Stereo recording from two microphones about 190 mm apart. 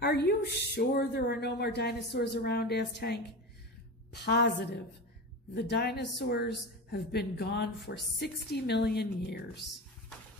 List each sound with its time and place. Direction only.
0.0 s a woman's voice: 60° left (ahead or behind)
5.5 s a woman's voice: 60° left (ahead or behind)